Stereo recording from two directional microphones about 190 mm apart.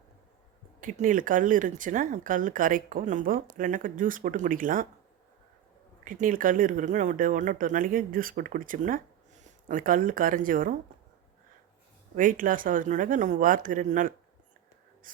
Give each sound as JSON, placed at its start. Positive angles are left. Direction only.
{"t": 0.8, "sound": "speech", "side_deg": -40}
{"t": 6.1, "sound": "speech", "side_deg": -45}
{"t": 12.1, "sound": "speech", "side_deg": -45}
{"t": 15.1, "sound": "a sound", "side_deg": -45}